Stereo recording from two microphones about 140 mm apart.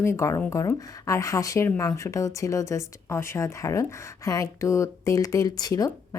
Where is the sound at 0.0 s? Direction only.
20° left (ahead or behind).